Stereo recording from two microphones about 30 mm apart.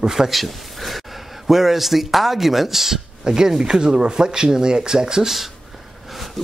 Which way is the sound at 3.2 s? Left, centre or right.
Right.